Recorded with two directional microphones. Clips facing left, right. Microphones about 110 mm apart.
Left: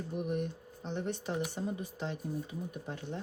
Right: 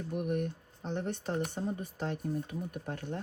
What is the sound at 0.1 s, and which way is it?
Speech, 55° right (ahead or behind).